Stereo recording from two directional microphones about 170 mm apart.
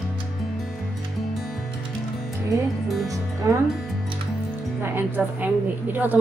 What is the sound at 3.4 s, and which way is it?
Speech, 20° right (ahead or behind).